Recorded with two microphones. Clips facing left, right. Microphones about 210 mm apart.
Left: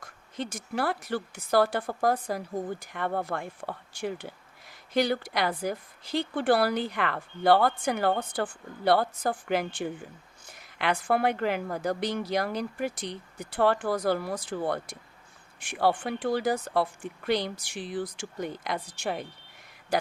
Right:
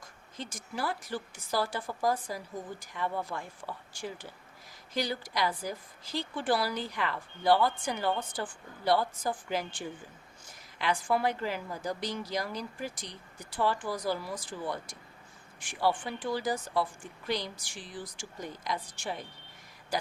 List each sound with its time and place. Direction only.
0.0 s a woman's voice: 65° left (ahead or behind)